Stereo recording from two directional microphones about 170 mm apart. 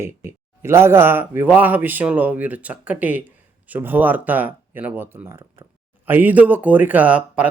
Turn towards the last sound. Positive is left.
turn(degrees=-10)  # may be behind; listen again after turning